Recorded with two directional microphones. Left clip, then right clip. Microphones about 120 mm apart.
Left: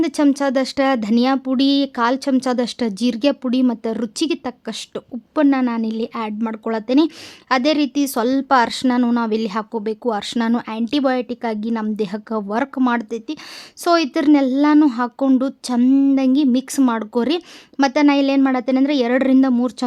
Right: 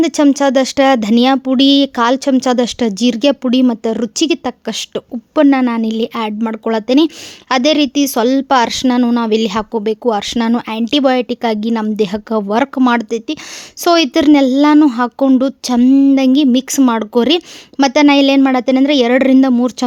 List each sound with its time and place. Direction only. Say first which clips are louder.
0.0 s speech: right 6 dB; 35° right (ahead or behind)